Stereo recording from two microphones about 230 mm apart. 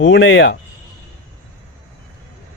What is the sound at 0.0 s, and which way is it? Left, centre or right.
Speech, left.